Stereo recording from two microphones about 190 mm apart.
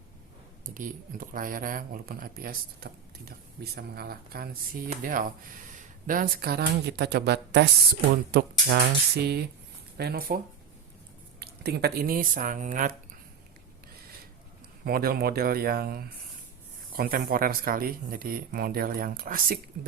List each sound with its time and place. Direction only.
0.6 s speech: 45° right (ahead or behind)
14.8 s speech: 50° right (ahead or behind)